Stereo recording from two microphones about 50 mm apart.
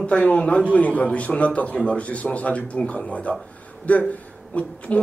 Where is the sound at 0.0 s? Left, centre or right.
Left.